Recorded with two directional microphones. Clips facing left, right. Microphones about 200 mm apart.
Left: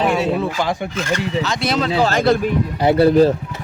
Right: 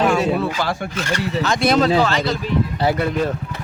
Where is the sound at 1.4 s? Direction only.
50° right (ahead or behind).